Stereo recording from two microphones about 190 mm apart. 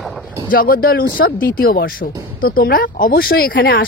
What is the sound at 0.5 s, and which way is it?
A woman's voice, 50° left (ahead or behind).